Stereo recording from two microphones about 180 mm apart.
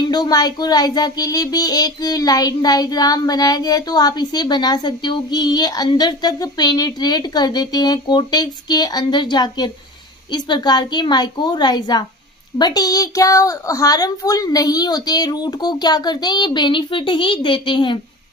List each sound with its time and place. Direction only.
0.0 s speech: 20° left (ahead or behind)